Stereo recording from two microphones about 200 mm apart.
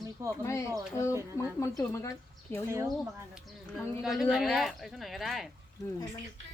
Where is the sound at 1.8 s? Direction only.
15° left (ahead or behind).